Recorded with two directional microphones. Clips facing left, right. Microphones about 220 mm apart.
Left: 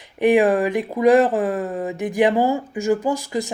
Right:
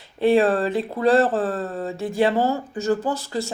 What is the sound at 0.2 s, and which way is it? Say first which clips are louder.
Speech: left 2 dB; 15° left (ahead or behind).